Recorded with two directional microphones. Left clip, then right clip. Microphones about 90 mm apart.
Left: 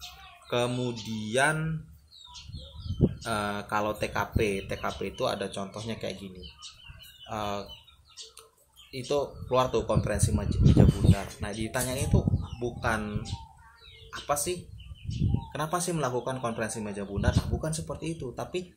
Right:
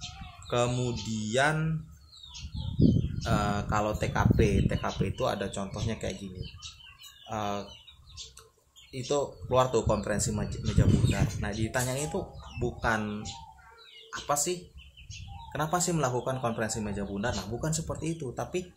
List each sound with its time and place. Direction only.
0.5 s speech: 15° right (ahead or behind)
3.3 s speech: 15° right (ahead or behind)
8.9 s speech: 15° right (ahead or behind)
14.2 s speech: 25° right (ahead or behind)